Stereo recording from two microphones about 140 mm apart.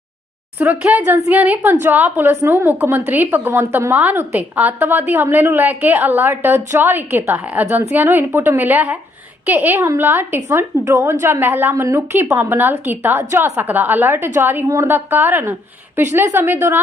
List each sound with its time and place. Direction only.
0.6 s a woman's voice: 10° right (ahead or behind)